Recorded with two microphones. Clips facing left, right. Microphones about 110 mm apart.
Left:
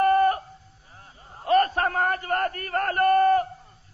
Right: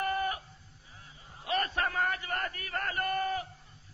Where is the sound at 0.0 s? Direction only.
50° left (ahead or behind).